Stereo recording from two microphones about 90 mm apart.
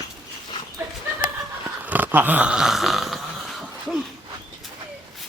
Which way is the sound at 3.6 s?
5° right (ahead or behind).